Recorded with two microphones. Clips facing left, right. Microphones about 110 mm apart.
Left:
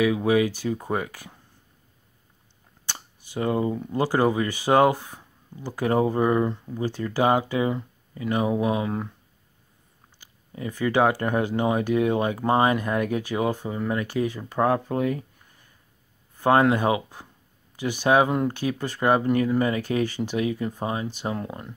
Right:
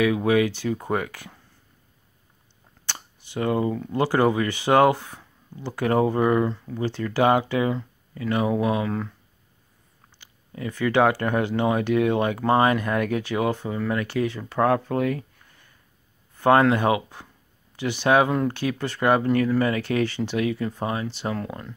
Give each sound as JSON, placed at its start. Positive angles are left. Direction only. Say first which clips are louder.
{"t": 0.0, "sound": "speech", "louder": "right 1 dB", "side_deg": 20}
{"t": 2.9, "sound": "speech", "louder": "right 1 dB", "side_deg": 25}
{"t": 10.5, "sound": "speech", "louder": "right 1 dB", "side_deg": 20}
{"t": 16.4, "sound": "speech", "louder": "right 1 dB", "side_deg": 20}